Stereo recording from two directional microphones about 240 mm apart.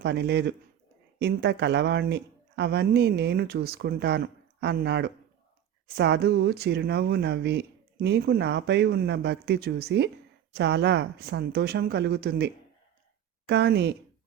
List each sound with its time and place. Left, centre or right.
0.0 s speech: right
13.5 s speech: right